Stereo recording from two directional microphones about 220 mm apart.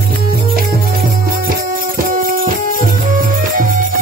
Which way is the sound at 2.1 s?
40° right (ahead or behind).